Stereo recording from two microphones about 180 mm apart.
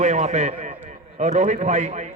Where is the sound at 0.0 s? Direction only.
40° right (ahead or behind).